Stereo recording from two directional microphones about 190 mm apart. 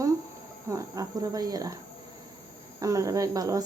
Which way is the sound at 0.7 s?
15° right (ahead or behind).